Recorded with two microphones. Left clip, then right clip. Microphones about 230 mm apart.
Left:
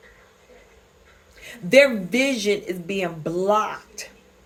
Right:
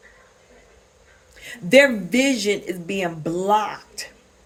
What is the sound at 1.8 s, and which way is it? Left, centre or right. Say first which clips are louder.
Speech: left 1 dB; right.